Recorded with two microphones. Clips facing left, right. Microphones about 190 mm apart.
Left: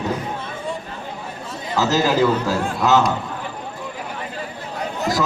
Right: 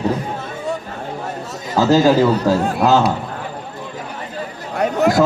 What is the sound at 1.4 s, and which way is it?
Chatter, 45° right (ahead or behind).